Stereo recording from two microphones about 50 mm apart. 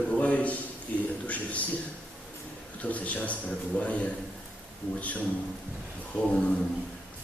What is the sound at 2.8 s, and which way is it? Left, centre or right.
A man's voice, left.